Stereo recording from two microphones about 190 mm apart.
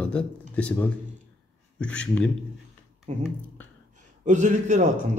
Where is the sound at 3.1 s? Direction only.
35° right (ahead or behind).